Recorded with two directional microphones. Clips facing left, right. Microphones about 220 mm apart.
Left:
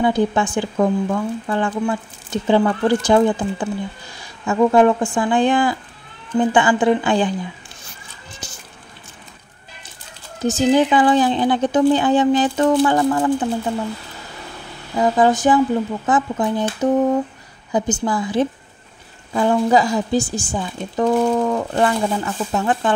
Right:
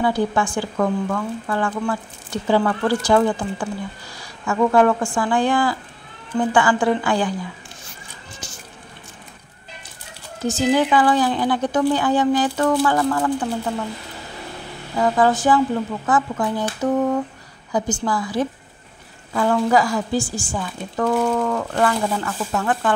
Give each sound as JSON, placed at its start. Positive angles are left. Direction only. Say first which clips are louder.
{"t": 0.0, "sound": "speech", "louder": "left 3 dB", "side_deg": 20}
{"t": 10.4, "sound": "speech", "louder": "left 3 dB", "side_deg": 20}
{"t": 15.0, "sound": "speech", "louder": "left 2 dB", "side_deg": 20}